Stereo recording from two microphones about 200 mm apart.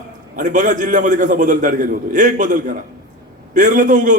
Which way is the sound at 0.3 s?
40° right (ahead or behind).